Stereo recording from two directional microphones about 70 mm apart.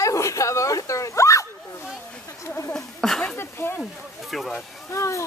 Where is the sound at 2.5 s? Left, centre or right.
Left.